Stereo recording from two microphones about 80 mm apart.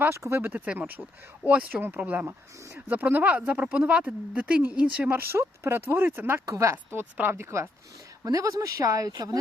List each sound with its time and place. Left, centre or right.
0.2 s speech: right
0.4 s speech: centre
2.2 s speech: right
5.0 s speech: right
6.4 s speech: right
8.2 s speech: right